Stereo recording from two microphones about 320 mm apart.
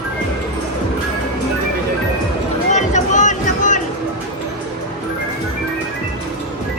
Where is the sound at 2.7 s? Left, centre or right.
Left.